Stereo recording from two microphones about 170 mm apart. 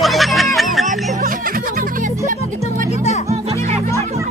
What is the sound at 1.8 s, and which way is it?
Music, 50° right (ahead or behind).